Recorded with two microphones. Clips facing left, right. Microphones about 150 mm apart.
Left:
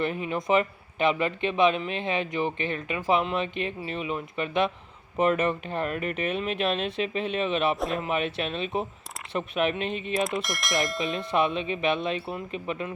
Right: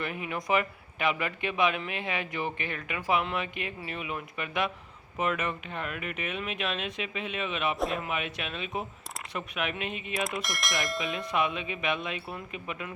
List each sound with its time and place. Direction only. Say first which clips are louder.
0.0 s a man's voice: left 6 dB; 30° left (ahead or behind)
7.8 s speech: left 2 dB; centre (ahead or behind)
8.0 s speech: left 6 dB; 30° left (ahead or behind)
10.2 s speech: left 4 dB; centre (ahead or behind)
11.3 s a man's voice: left 5 dB; 30° left (ahead or behind)